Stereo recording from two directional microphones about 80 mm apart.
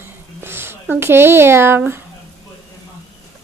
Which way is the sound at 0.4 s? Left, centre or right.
Right.